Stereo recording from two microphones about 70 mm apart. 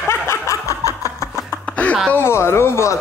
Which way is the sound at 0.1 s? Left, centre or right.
Left.